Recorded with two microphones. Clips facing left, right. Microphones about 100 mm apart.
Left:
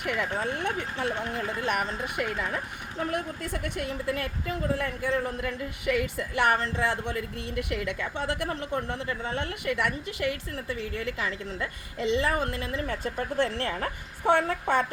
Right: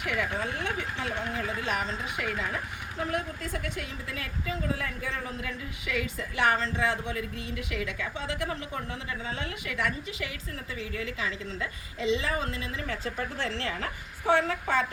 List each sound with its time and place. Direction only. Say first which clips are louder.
0.0 s a woman's voice: left 2 dB; 50° left (ahead or behind)